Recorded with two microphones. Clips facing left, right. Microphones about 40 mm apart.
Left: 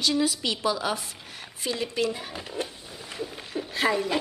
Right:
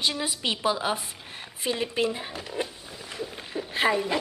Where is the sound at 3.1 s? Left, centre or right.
Centre.